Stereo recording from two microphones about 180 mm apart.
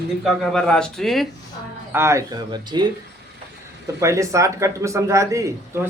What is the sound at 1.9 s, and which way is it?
Speech, 15° right (ahead or behind).